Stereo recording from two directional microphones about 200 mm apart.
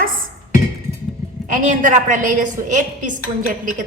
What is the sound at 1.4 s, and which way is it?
A woman's voice, 40° right (ahead or behind).